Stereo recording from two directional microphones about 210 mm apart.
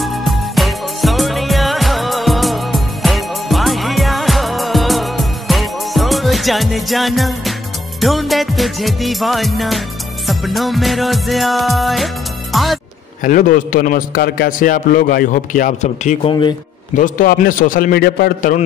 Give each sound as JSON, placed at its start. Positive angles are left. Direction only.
{"t": 0.0, "sound": "music", "side_deg": 0}
{"t": 12.5, "sound": "speech", "side_deg": 0}
{"t": 13.2, "sound": "a man's voice", "side_deg": 40}
{"t": 16.9, "sound": "a man's voice", "side_deg": 40}